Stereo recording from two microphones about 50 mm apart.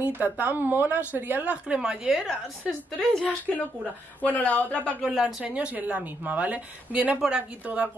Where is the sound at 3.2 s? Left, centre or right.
Left.